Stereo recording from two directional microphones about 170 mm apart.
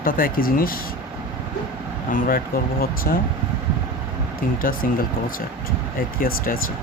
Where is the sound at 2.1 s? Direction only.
60° left (ahead or behind).